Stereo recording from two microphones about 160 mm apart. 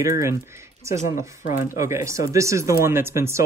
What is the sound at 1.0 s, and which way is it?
Speech, 55° left (ahead or behind).